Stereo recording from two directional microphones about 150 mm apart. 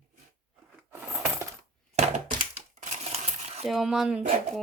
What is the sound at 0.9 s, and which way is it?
Coin, 15° right (ahead or behind).